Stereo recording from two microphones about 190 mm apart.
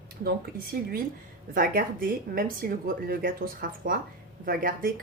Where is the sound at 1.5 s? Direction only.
45° right (ahead or behind).